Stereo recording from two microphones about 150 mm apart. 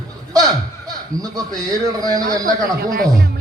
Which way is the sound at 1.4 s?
25° right (ahead or behind).